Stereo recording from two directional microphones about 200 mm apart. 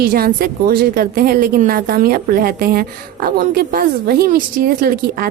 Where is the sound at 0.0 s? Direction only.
45° right (ahead or behind).